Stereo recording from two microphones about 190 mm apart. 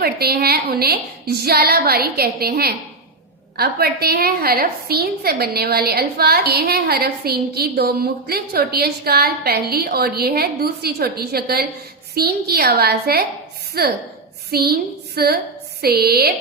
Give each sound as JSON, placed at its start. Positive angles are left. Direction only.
{"t": 0.0, "sound": "a woman's voice", "side_deg": -55}